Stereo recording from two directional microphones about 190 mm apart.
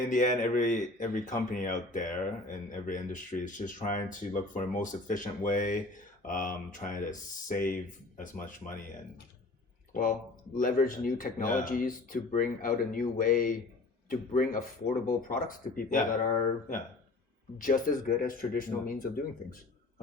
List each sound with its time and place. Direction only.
0.0 s a man's voice: 45° left (ahead or behind)
9.9 s a man's voice: 45° left (ahead or behind)
17.6 s a man's voice: 45° left (ahead or behind)